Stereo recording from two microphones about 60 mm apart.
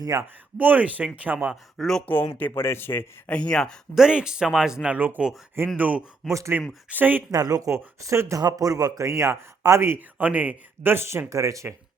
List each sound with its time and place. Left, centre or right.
0.1 s speech: right
0.6 s speech: right
1.8 s speech: centre
2.6 s speech: left
3.2 s speech: centre
3.9 s speech: centre
4.9 s speech: right
6.2 s speech: centre
6.9 s speech: right
7.3 s speech: right
8.0 s speech: right
8.4 s speech: right
10.2 s speech: right
10.8 s speech: right